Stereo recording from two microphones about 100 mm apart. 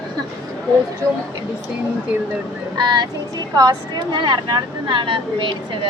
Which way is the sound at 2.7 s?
45° right (ahead or behind).